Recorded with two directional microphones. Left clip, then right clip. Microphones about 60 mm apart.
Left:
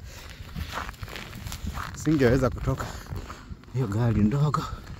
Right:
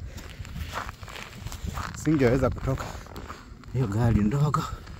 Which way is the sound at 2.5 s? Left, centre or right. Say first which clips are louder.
Even; centre.